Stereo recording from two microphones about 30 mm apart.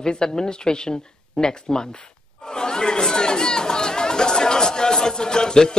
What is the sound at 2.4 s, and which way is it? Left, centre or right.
Chatter, left.